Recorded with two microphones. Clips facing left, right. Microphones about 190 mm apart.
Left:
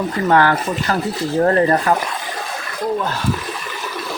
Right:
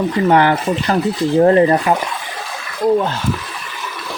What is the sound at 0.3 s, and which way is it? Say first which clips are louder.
Speech: right 1 dB; 20° right (ahead or behind).